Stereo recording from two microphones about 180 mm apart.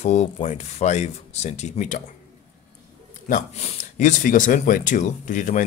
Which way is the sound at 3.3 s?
35° left (ahead or behind).